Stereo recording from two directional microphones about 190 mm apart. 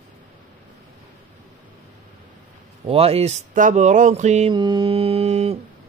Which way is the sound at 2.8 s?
30° right (ahead or behind).